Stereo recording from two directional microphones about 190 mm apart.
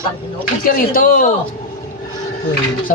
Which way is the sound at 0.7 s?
50° left (ahead or behind).